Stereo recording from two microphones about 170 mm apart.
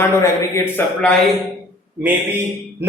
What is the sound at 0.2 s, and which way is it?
Speech, 10° left (ahead or behind).